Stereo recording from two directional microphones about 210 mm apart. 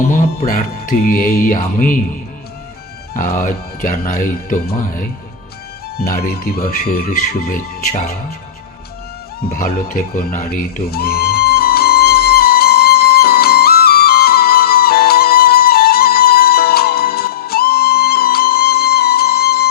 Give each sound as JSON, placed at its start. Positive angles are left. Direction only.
{"t": 0.4, "sound": "speech", "side_deg": 40}
{"t": 3.2, "sound": "speech", "side_deg": 40}
{"t": 6.0, "sound": "speech", "side_deg": 45}
{"t": 9.5, "sound": "music", "side_deg": 40}